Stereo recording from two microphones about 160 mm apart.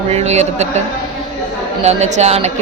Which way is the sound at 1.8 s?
45° right (ahead or behind).